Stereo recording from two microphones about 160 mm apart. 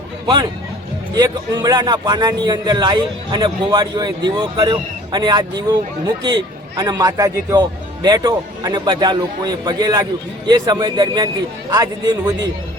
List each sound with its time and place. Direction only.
1.1 s speech: 25° right (ahead or behind)